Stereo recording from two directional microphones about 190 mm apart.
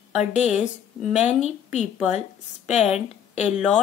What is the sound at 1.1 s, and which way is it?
Speech, 35° left (ahead or behind).